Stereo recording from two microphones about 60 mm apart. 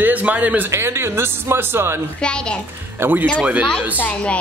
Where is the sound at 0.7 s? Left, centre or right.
Right.